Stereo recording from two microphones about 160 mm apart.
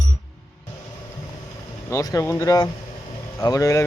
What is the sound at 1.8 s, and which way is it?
Speech, 20° left (ahead or behind).